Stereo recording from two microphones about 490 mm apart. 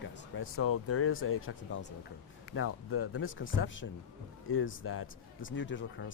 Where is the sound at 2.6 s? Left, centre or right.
Left.